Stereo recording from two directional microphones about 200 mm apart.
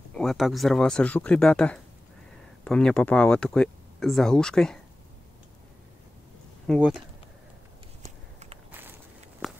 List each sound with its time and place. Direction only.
0.1 s speech: centre (ahead or behind)
6.7 s speech: centre (ahead or behind)
9.4 s walk: centre (ahead or behind)